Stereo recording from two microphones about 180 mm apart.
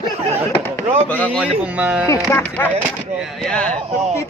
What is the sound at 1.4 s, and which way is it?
Speech, 5° right (ahead or behind).